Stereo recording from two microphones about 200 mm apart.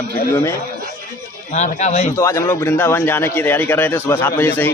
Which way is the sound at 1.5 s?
35° left (ahead or behind).